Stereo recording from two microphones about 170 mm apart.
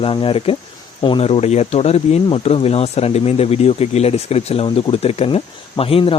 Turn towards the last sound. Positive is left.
turn(degrees=35)  # may be behind; listen again after turning